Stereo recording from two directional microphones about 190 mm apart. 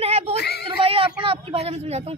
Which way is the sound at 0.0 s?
30° right (ahead or behind).